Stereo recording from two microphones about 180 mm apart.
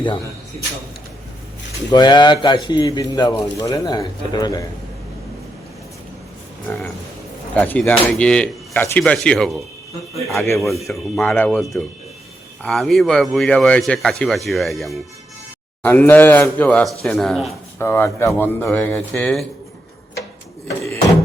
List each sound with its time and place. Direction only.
1.9 s speech: 25° left (ahead or behind)
7.5 s speech: 10° left (ahead or behind)
10.6 s speech: centre (ahead or behind)
17.7 s speech: 15° left (ahead or behind)
20.7 s door: 15° left (ahead or behind)